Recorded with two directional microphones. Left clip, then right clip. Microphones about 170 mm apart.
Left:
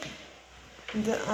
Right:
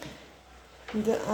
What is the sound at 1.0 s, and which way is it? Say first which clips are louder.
Speech: right 2 dB; 30° right (ahead or behind).